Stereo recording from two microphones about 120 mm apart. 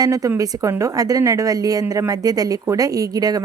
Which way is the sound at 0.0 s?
30° right (ahead or behind).